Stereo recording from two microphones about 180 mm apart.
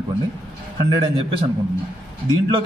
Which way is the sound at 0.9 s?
30° right (ahead or behind).